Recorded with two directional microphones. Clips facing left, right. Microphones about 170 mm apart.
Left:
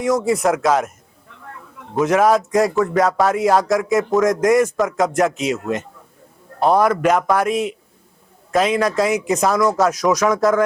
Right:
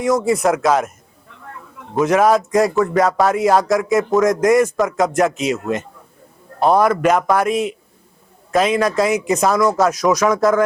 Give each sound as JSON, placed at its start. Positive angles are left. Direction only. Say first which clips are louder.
{"t": 0.3, "sound": "speech", "louder": "right 1 dB", "side_deg": -15}
{"t": 2.0, "sound": "speech", "louder": "right 1 dB", "side_deg": -10}
{"t": 5.5, "sound": "speech", "louder": "right 1 dB", "side_deg": -20}
{"t": 6.7, "sound": "speech", "louder": "right 1 dB", "side_deg": -10}